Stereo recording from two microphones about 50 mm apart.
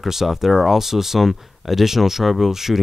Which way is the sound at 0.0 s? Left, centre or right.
Centre.